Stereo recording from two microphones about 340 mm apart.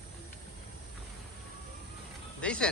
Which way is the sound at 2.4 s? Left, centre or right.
Centre.